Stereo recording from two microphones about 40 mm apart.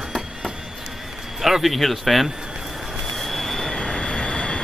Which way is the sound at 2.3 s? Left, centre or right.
Centre.